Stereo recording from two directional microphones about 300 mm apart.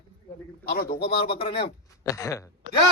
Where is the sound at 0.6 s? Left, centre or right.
Left.